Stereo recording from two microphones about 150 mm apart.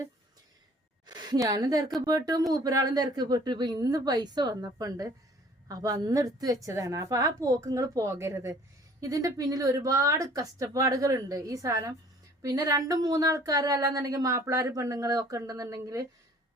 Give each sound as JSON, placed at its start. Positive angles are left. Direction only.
{"t": 1.0, "sound": "a woman's voice", "side_deg": -30}